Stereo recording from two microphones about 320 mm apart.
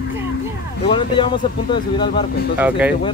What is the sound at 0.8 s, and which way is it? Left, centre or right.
Speech, centre.